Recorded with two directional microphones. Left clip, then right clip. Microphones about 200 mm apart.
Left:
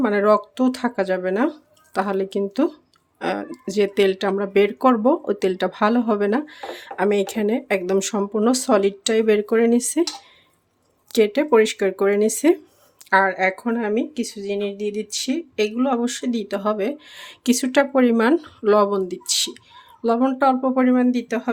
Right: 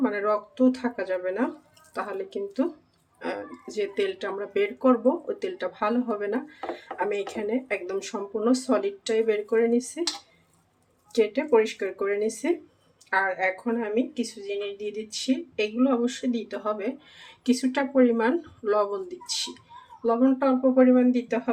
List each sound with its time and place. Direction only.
0.0 s speech: 60° left (ahead or behind)
11.1 s speech: 60° left (ahead or behind)